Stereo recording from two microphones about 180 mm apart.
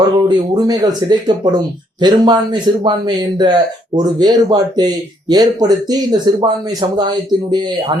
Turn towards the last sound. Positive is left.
turn(degrees=-25)  # may be behind; listen again after turning